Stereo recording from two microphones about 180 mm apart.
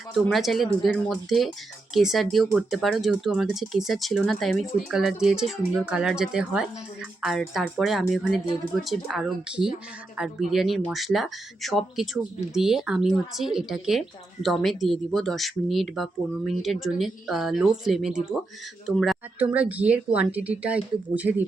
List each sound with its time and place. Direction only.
0.1 s a woman's voice: centre (ahead or behind)